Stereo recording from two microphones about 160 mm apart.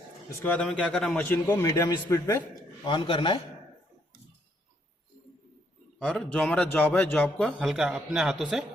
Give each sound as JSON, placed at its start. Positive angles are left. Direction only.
{"t": 0.3, "sound": "a man's voice", "side_deg": 10}
{"t": 2.8, "sound": "a man's voice", "side_deg": 30}
{"t": 6.0, "sound": "a man's voice", "side_deg": 5}